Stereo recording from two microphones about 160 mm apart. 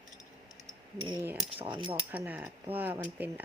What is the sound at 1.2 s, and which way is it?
Speech, 10° right (ahead or behind).